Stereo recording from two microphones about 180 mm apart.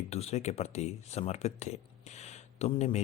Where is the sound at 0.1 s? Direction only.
35° left (ahead or behind).